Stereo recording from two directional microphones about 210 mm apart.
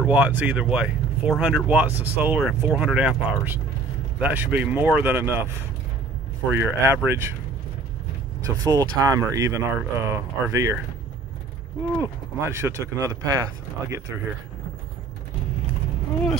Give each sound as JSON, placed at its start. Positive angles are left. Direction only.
{"t": 0.0, "sound": "speech", "side_deg": -5}
{"t": 6.5, "sound": "speech", "side_deg": -10}
{"t": 8.5, "sound": "speech", "side_deg": -15}
{"t": 12.0, "sound": "speech", "side_deg": -10}